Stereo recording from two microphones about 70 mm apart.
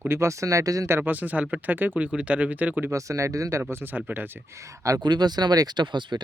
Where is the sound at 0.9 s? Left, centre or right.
Right.